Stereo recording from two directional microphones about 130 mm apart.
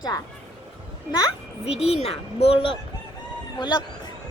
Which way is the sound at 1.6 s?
50° left (ahead or behind).